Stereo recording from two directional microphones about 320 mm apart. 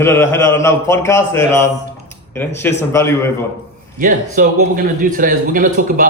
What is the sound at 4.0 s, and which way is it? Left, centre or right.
A man's voice, right.